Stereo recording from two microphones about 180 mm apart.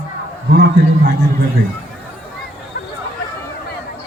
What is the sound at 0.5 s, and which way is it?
Speech, 65° right (ahead or behind).